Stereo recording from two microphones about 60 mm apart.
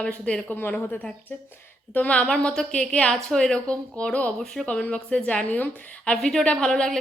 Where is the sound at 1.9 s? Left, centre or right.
Left.